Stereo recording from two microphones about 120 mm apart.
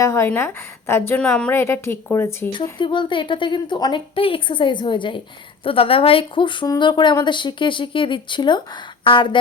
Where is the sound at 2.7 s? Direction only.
40° left (ahead or behind).